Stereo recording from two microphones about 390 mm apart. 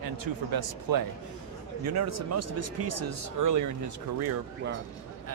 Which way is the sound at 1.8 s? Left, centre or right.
Right.